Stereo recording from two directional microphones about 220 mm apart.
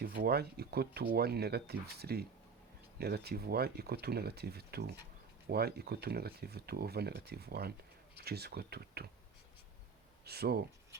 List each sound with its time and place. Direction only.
0.0 s speech: 45° right (ahead or behind)
10.2 s speech: 45° right (ahead or behind)